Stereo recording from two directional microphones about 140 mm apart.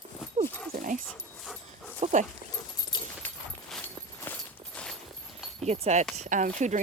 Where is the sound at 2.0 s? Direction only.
50° right (ahead or behind).